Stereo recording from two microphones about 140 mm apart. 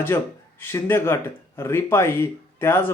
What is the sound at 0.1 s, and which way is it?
Speech, 20° left (ahead or behind).